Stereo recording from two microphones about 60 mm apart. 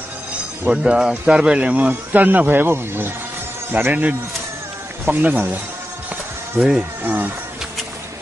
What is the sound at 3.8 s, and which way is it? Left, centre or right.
Speech, right.